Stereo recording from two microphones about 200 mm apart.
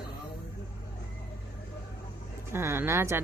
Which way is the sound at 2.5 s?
10° right (ahead or behind).